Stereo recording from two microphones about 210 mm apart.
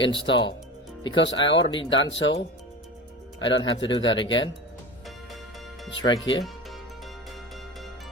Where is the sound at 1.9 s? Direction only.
65° left (ahead or behind).